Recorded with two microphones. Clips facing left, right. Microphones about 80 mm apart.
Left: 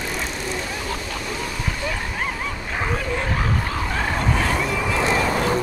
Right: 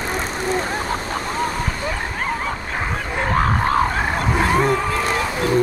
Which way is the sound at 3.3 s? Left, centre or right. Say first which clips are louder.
Right 7 dB; right.